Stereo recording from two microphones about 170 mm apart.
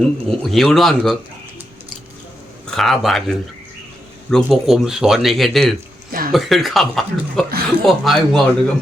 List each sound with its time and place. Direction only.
0.0 s speech: centre (ahead or behind)
2.6 s speech: centre (ahead or behind)
4.4 s speech: centre (ahead or behind)
6.1 s speech: 60° right (ahead or behind)
6.3 s speech: centre (ahead or behind)